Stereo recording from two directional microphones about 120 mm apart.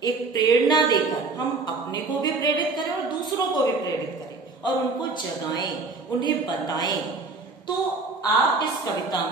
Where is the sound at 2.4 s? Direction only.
40° left (ahead or behind).